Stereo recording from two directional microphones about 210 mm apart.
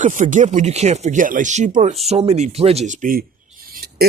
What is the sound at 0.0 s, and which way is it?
Speech, 35° right (ahead or behind).